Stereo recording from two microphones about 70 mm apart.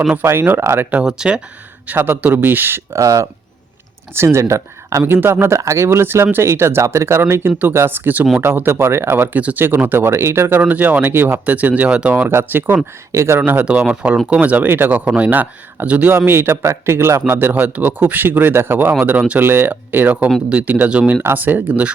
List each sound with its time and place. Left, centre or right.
0.3 s speech: right
1.0 s speech: centre
1.9 s speech: right
3.0 s speech: right
4.1 s speech: right
5.0 s speech: right
10.6 s speech: right
12.3 s speech: right
13.1 s speech: right
13.4 s speech: right
13.7 s speech: centre